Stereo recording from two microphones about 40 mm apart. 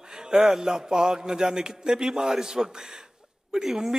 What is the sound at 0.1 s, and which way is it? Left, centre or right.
A man's voice, centre.